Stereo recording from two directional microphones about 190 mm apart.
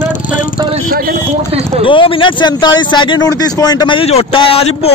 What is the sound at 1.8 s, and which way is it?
Speech, 25° left (ahead or behind).